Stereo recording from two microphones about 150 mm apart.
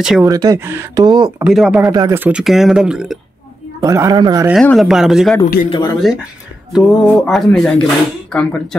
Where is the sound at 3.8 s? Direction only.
20° right (ahead or behind).